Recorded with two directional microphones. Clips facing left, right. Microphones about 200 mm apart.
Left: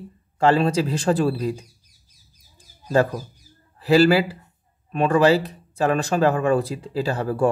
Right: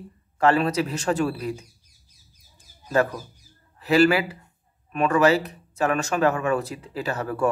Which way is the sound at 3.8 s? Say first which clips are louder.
Left 3 dB; 30° left (ahead or behind).